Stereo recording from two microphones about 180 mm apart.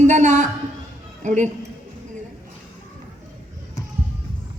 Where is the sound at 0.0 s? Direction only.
40° right (ahead or behind).